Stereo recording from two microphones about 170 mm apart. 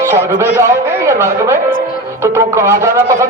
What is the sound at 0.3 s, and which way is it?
A man's voice, 15° right (ahead or behind).